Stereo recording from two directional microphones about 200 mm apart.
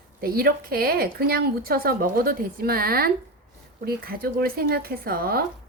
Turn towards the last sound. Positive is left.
turn(degrees=-50)  # may be behind; listen again after turning